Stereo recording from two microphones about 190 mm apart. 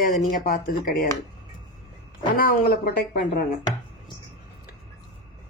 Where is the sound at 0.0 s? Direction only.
50° left (ahead or behind).